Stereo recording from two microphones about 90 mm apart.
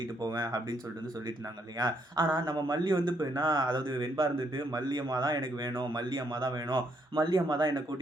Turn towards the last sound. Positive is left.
turn(degrees=-50)  # may be behind; listen again after turning